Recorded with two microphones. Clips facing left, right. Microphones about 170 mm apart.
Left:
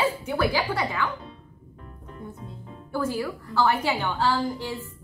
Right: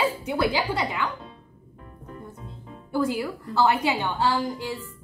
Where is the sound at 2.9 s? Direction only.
15° right (ahead or behind).